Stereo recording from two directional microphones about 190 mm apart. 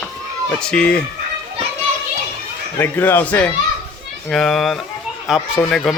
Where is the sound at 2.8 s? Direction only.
10° left (ahead or behind).